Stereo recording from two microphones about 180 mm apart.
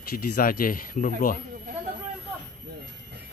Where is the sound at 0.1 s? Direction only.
55° left (ahead or behind).